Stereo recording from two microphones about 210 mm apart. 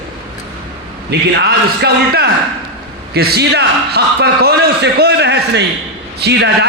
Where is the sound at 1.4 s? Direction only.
50° right (ahead or behind).